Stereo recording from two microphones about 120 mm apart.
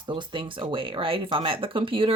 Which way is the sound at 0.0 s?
40° right (ahead or behind).